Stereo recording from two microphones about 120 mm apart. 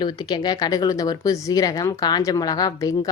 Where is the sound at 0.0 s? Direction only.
35° left (ahead or behind).